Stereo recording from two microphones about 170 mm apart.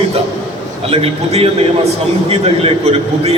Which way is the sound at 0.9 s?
35° right (ahead or behind).